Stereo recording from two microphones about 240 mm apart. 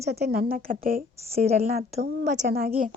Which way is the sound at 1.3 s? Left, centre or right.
Right.